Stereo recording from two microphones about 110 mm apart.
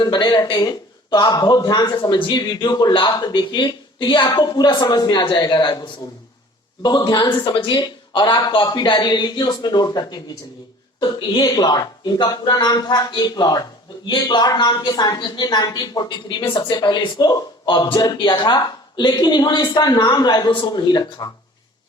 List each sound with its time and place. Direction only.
0.0 s a woman's voice: 40° left (ahead or behind)